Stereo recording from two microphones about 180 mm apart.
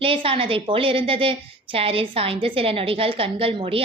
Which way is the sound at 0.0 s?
30° right (ahead or behind).